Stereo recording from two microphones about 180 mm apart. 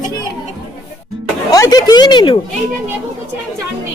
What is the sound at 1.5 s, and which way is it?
Speech, 20° left (ahead or behind).